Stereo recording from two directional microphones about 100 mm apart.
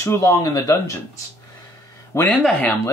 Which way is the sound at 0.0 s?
25° left (ahead or behind).